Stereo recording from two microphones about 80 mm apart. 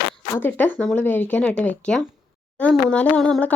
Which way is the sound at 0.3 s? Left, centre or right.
Left.